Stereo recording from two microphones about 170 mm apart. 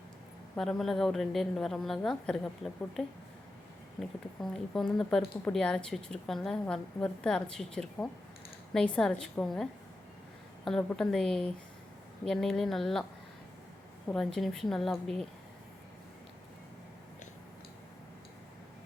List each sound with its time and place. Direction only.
0.5 s speech: 5° left (ahead or behind)
10.7 s speech: 5° left (ahead or behind)
14.3 s speech: centre (ahead or behind)